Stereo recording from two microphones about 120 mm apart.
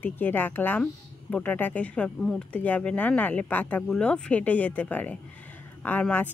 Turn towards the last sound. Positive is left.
turn(degrees=15)  # may be behind; listen again after turning